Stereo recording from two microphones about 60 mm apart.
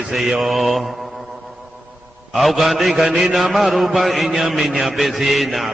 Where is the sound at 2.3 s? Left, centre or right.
Centre.